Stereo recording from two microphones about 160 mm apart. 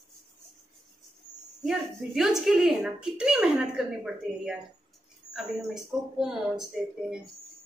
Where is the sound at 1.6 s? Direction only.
Centre (ahead or behind).